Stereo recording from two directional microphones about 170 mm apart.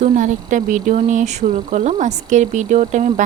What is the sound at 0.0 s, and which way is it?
Speech, 45° right (ahead or behind).